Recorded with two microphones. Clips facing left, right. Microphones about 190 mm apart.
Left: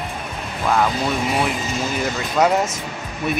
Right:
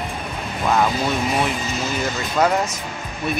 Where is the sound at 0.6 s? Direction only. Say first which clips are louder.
Even; 5° right (ahead or behind).